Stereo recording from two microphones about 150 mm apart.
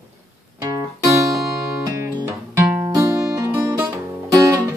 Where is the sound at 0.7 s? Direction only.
25° right (ahead or behind).